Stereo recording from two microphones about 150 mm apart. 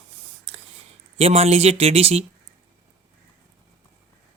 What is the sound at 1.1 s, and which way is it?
Speech, 45° right (ahead or behind).